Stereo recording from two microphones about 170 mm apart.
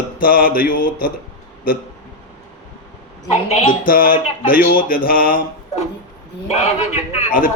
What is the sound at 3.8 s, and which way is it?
A man's voice, 55° left (ahead or behind).